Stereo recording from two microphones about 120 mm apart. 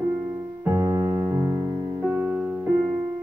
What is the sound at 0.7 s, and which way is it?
Keyboard, 30° right (ahead or behind).